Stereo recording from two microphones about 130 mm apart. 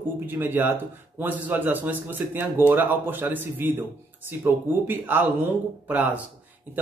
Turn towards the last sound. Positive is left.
turn(degrees=-10)  # may be behind; listen again after turning